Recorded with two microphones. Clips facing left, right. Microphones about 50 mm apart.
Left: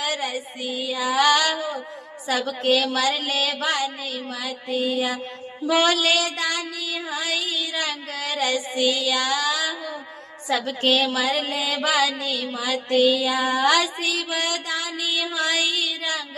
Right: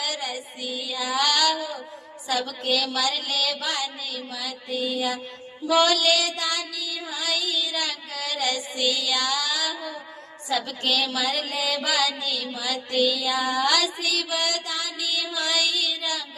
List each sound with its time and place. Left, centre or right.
0.0 s music: left
0.6 s music: left
2.2 s a woman's voice: left
6.4 s child singing: left; by 9.9 s centre
10.7 s music: left